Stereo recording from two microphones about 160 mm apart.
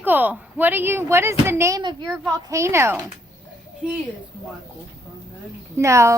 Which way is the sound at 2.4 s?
20° right (ahead or behind).